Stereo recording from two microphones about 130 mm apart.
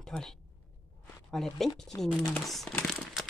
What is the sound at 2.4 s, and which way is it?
Crumpling, centre (ahead or behind).